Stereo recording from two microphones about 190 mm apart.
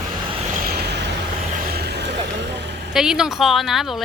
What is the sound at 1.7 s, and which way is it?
Vehicle, 60° right (ahead or behind).